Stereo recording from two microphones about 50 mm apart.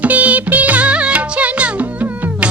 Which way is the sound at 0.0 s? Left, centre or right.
Right.